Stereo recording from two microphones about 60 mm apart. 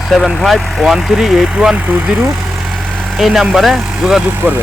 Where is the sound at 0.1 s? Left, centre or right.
Centre.